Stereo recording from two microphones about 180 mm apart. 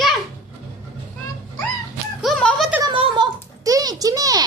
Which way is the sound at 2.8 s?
30° right (ahead or behind).